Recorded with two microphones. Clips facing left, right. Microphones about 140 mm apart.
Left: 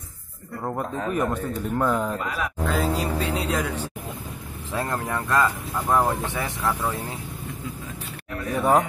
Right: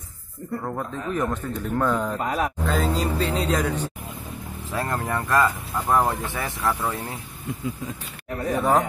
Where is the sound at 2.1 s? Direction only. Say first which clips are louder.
Right 4 dB; 40° right (ahead or behind).